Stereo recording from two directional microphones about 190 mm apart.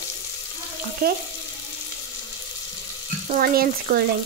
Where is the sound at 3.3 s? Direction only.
50° right (ahead or behind).